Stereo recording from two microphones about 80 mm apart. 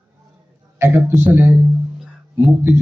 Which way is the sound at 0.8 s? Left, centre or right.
Right.